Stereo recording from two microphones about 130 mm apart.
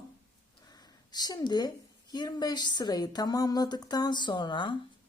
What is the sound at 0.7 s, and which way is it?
A woman's voice, 30° left (ahead or behind).